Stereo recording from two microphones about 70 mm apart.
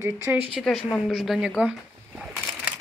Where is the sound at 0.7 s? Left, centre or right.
Centre.